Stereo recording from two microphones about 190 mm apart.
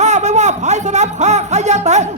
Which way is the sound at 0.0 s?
40° right (ahead or behind).